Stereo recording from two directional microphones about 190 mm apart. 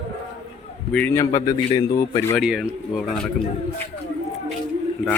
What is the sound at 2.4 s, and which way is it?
Speech, centre (ahead or behind).